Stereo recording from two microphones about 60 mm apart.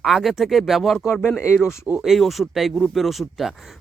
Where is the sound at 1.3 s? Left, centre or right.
Left.